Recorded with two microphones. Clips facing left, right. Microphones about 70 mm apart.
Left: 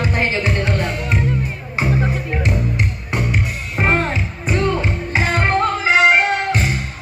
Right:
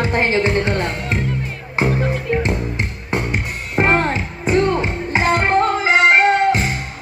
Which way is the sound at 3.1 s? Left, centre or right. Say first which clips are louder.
Right 1 dB; right.